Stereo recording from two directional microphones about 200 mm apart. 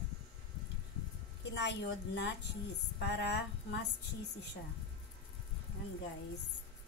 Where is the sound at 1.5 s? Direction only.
60° left (ahead or behind).